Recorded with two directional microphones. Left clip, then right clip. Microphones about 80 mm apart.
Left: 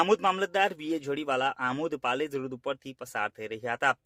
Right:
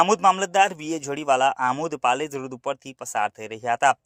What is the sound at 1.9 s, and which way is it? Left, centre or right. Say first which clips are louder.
Speech: right 7 dB; right.